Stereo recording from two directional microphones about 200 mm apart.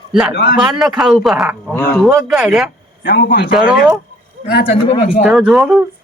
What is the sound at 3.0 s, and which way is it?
Speech, 55° left (ahead or behind).